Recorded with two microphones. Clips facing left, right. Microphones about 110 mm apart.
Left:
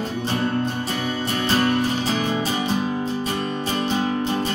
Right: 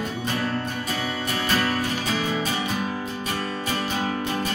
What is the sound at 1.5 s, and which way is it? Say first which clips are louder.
Music: left 5 dB; 30° left (ahead or behind).